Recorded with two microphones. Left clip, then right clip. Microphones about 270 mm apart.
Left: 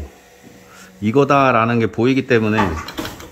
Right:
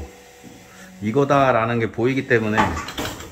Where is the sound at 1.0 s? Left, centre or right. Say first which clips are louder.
Left 3 dB; left.